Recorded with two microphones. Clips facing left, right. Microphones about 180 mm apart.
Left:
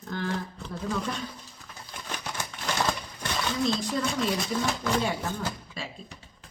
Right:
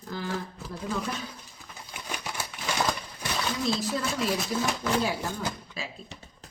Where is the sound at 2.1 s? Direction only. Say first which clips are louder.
Even; 5° right (ahead or behind).